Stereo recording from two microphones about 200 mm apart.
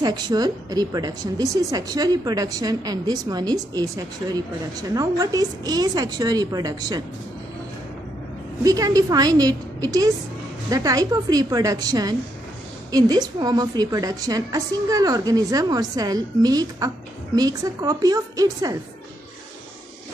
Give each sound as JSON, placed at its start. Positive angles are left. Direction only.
{"t": 0.0, "sound": "a woman's voice", "side_deg": -20}
{"t": 8.6, "sound": "a woman's voice", "side_deg": -20}